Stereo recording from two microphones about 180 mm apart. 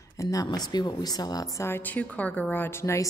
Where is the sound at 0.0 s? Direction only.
20° left (ahead or behind).